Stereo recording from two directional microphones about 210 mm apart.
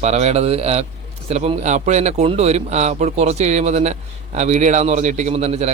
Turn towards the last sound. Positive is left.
turn(degrees=-30)  # may be behind; listen again after turning